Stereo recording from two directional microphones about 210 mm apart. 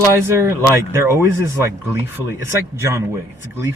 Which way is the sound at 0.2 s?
10° right (ahead or behind).